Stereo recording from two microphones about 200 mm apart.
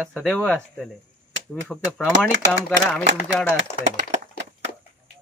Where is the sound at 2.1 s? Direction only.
65° right (ahead or behind).